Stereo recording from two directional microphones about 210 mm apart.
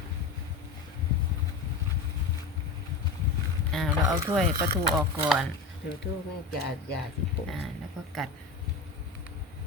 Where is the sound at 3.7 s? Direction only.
5° left (ahead or behind).